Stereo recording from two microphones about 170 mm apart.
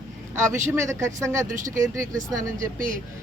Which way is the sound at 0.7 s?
15° right (ahead or behind).